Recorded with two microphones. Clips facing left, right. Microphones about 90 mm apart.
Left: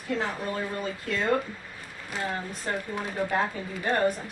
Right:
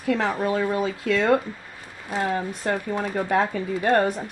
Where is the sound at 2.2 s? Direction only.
65° right (ahead or behind).